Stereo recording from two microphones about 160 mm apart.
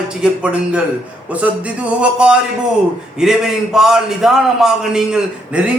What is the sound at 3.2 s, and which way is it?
A man's voice, 5° right (ahead or behind).